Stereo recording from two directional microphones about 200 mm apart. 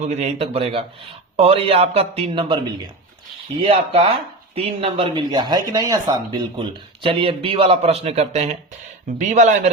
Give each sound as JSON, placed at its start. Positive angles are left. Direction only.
{"t": 0.0, "sound": "speech", "side_deg": -35}